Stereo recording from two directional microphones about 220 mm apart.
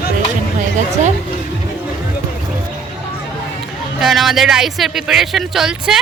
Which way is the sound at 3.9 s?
Centre (ahead or behind).